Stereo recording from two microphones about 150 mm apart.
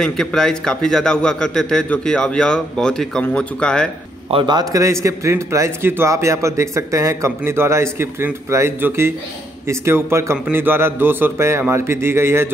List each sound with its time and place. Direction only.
0.0 s a man's voice: 5° left (ahead or behind)
4.3 s a man's voice: 30° right (ahead or behind); by 12.4 s 15° right (ahead or behind)